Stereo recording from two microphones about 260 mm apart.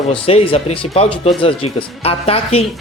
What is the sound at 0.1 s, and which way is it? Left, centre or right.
Speech, left.